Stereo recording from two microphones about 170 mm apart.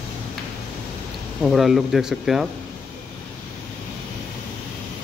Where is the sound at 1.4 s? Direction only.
Centre (ahead or behind).